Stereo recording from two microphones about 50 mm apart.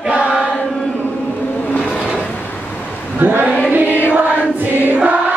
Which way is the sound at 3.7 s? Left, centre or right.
Right.